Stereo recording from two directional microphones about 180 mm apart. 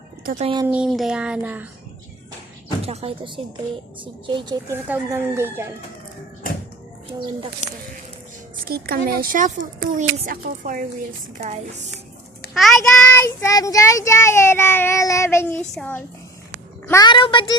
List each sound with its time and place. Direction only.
0.4 s speech: 25° right (ahead or behind)
0.7 s a sound: 5° right (ahead or behind)
2.8 s speech: 35° right (ahead or behind); by 5.6 s 15° right (ahead or behind)
8.6 s speech: 55° right (ahead or behind); by 11.8 s 40° right (ahead or behind)
12.5 s a child's voice: centre (ahead or behind)
13.1 s child singing: 15° left (ahead or behind)
16.8 s a child's voice: 20° left (ahead or behind)